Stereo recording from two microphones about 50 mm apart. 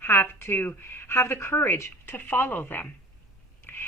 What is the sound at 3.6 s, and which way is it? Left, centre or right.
Biting, left.